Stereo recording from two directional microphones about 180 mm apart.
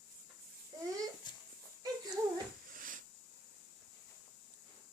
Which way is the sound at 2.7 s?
50° right (ahead or behind).